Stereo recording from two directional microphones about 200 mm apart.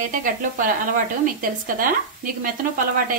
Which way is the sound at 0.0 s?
40° right (ahead or behind).